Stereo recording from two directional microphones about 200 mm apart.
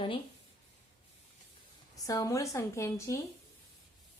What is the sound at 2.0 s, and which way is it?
Speech, 15° left (ahead or behind).